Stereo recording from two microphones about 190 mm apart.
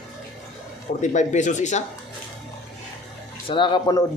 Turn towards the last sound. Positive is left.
turn(degrees=25)  # may be behind; listen again after turning